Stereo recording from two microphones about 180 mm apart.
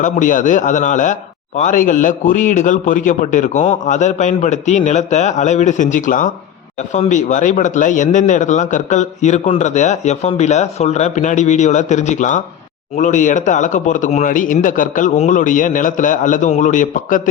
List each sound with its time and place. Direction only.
0.0 s a man's voice: 45° left (ahead or behind)